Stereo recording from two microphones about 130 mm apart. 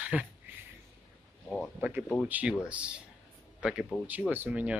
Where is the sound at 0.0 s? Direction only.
10° right (ahead or behind).